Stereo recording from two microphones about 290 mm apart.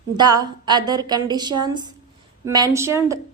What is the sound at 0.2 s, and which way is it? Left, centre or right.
A woman's voice, centre.